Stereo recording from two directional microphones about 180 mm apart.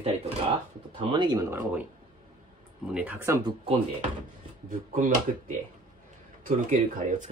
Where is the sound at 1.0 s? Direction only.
25° right (ahead or behind).